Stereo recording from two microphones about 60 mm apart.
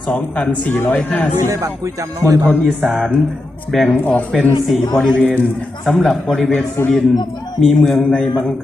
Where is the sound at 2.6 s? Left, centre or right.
Centre.